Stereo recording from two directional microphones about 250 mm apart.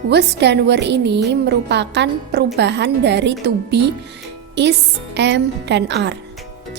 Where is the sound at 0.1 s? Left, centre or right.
Right.